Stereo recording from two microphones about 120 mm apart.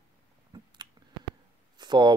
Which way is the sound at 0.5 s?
35° right (ahead or behind).